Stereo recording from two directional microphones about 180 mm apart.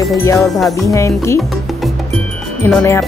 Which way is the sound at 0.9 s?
15° left (ahead or behind).